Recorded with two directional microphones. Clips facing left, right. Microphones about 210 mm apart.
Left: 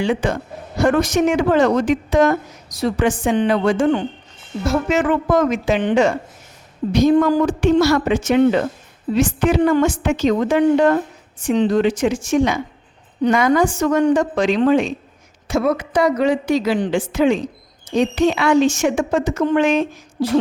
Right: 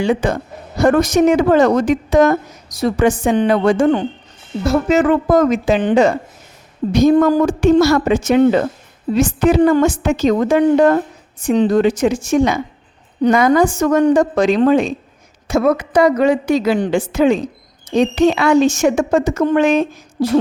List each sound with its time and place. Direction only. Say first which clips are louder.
0.0 s a woman's voice: right 3 dB; 40° right (ahead or behind)
6.9 s a woman's voice: right 3 dB; 45° right (ahead or behind)